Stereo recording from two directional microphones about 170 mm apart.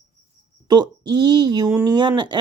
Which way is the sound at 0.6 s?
25° right (ahead or behind).